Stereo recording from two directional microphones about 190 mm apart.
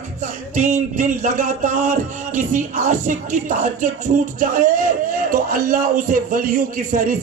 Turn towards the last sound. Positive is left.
turn(degrees=-45)  # may be behind; listen again after turning